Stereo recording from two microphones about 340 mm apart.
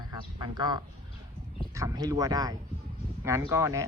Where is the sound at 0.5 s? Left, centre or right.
Centre.